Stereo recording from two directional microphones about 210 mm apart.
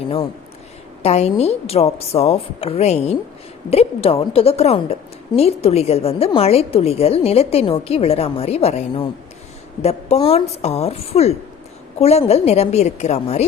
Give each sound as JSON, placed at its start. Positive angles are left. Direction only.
{"t": 1.0, "sound": "a woman's voice", "side_deg": 30}